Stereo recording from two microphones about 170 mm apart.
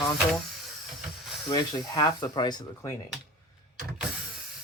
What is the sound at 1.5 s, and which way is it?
Speech, 25° left (ahead or behind).